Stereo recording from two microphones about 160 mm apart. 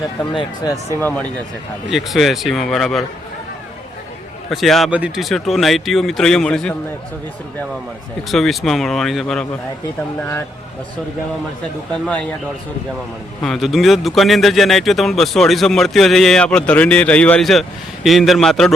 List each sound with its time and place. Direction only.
0.3 s speech: 25° left (ahead or behind)
1.9 s speech: centre (ahead or behind)
4.4 s speech: centre (ahead or behind)
8.3 s speech: centre (ahead or behind)
12.0 s speech: 5° left (ahead or behind)
13.4 s speech: centre (ahead or behind)